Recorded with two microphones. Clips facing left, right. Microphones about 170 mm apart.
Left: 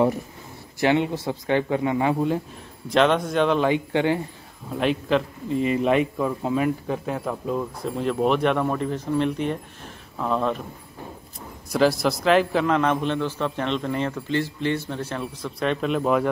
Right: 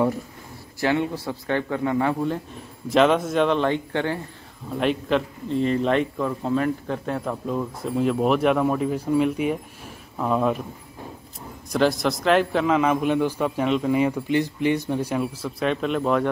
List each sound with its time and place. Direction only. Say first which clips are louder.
0.7 s a man's voice: left 2 dB; 20° left (ahead or behind)
2.9 s a man's voice: right 1 dB; centre (ahead or behind); by 4.2 s 15° left (ahead or behind)
4.7 s a man's voice: even; centre (ahead or behind)
11.7 s a man's voice: left 1 dB; 5° left (ahead or behind)